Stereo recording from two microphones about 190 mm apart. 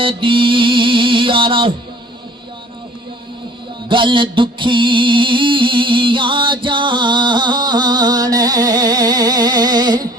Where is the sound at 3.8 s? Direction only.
25° right (ahead or behind).